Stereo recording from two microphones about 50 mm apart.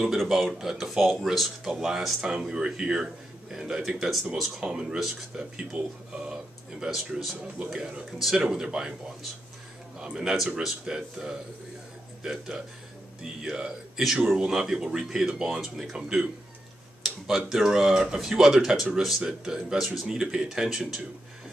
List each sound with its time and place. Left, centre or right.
0.1 s speech: centre
6.9 s speech: centre
7.7 s speech: centre
9.9 s a man's voice: centre
17.0 s tick-tock: centre
17.5 s speech: centre
19.8 s speech: centre
20.1 s speech: centre